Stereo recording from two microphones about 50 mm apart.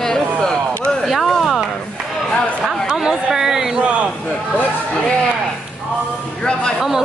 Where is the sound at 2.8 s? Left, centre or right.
Centre.